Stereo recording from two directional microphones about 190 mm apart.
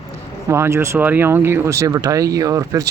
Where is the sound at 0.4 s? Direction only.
15° right (ahead or behind).